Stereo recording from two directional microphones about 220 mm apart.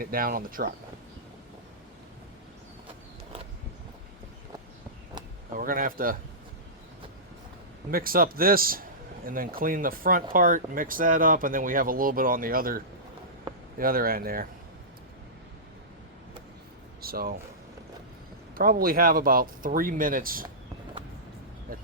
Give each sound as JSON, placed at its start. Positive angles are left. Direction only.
{"t": 0.0, "sound": "speech", "side_deg": -40}
{"t": 5.5, "sound": "speech", "side_deg": -40}
{"t": 7.9, "sound": "speech", "side_deg": -40}
{"t": 17.0, "sound": "speech", "side_deg": -40}
{"t": 18.5, "sound": "speech", "side_deg": -40}
{"t": 21.7, "sound": "a sound", "side_deg": -40}